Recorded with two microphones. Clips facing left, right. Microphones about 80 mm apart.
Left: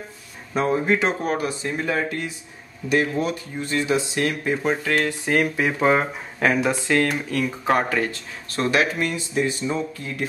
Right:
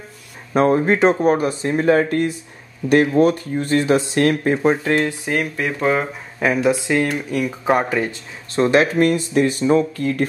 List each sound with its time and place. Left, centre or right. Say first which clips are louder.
0.5 s speech: right 5 dB; right
5.2 s speech: left 1 dB; centre; by 9.0 s right
9.0 s speech: right 7 dB; right